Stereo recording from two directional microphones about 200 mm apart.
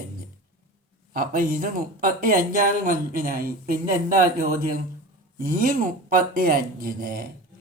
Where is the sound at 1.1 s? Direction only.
45° right (ahead or behind).